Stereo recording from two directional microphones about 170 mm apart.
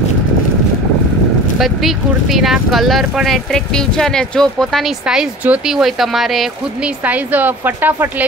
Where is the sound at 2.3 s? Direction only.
Centre (ahead or behind).